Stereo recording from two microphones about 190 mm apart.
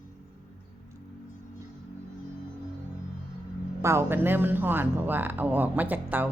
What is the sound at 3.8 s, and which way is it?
Speech, 15° right (ahead or behind).